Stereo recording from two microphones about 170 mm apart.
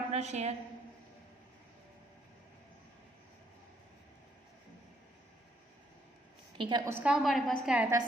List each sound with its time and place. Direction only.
0.1 s a woman's voice: 40° right (ahead or behind)
6.6 s a woman's voice: 25° right (ahead or behind)
6.9 s a woman's voice: 5° right (ahead or behind)